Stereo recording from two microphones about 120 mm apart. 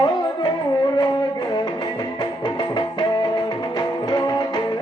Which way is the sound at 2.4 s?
35° left (ahead or behind).